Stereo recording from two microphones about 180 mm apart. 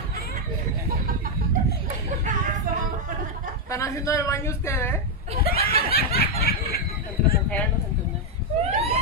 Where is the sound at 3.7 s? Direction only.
15° left (ahead or behind).